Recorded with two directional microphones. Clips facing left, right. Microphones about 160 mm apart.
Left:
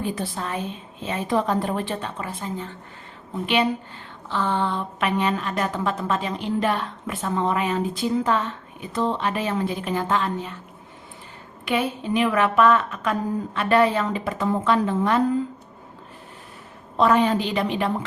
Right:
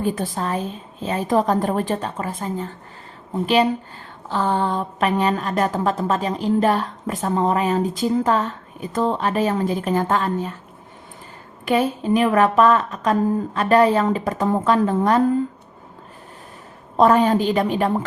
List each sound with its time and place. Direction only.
0.0 s a woman's voice: 45° right (ahead or behind)
11.6 s a woman's voice: 40° right (ahead or behind)
17.0 s a woman's voice: 40° right (ahead or behind)